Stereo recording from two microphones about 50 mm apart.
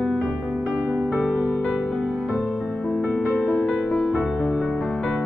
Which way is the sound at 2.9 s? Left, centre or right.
Centre.